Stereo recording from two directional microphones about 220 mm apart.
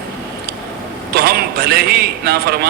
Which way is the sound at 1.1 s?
45° right (ahead or behind).